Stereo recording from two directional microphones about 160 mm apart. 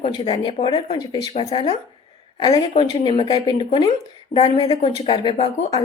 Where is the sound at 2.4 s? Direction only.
25° left (ahead or behind).